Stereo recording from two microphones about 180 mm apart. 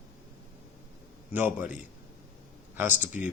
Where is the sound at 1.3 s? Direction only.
10° right (ahead or behind).